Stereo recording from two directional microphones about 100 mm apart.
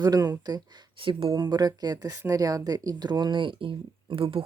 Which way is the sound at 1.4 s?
40° right (ahead or behind).